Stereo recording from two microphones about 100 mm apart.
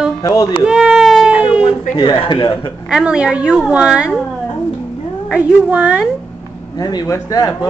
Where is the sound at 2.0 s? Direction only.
50° left (ahead or behind).